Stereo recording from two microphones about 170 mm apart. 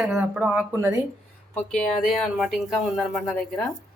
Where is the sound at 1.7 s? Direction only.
5° left (ahead or behind).